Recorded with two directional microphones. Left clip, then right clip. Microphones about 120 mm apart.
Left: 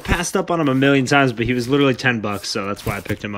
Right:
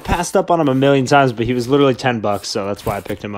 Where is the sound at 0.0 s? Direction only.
20° right (ahead or behind).